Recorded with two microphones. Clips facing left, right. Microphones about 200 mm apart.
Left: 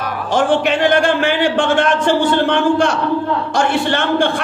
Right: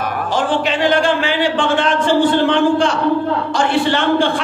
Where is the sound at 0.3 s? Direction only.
55° left (ahead or behind).